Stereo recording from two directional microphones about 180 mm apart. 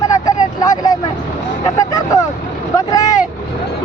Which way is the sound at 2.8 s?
20° left (ahead or behind).